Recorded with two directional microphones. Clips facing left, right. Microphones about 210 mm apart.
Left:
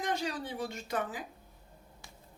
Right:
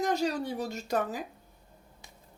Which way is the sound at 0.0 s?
40° right (ahead or behind).